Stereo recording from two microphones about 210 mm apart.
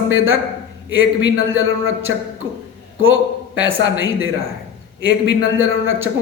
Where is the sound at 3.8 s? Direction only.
70° right (ahead or behind).